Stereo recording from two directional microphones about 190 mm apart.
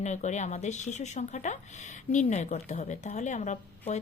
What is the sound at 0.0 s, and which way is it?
Speech, 40° left (ahead or behind).